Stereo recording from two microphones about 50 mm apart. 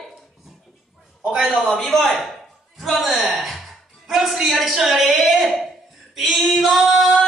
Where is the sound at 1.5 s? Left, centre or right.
Centre.